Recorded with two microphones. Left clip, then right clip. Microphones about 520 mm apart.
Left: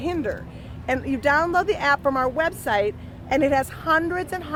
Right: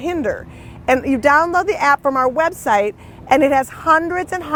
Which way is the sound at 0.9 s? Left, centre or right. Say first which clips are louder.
Right 8 dB; right.